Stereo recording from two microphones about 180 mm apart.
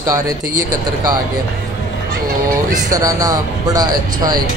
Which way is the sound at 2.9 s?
20° right (ahead or behind).